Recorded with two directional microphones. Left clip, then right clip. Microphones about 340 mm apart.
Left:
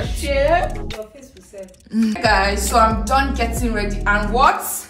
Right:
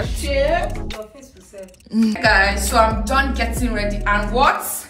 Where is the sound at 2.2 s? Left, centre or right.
Left.